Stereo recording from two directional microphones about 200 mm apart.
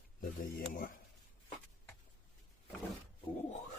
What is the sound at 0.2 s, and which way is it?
Speech, 45° left (ahead or behind).